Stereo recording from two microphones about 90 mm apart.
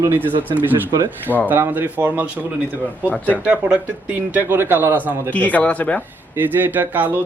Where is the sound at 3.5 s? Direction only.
15° right (ahead or behind).